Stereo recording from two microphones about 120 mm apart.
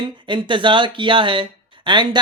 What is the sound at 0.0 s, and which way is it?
Speech, 45° right (ahead or behind).